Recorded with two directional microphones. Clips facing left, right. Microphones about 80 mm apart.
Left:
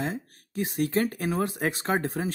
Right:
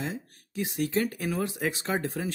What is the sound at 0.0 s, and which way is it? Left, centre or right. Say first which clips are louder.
Speech: left 3 dB; left.